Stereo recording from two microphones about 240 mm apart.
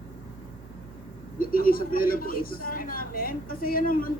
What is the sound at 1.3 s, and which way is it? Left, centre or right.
A woman's voice, left.